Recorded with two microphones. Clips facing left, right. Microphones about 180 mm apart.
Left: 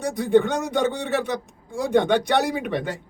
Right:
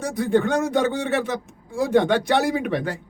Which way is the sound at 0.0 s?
Centre (ahead or behind).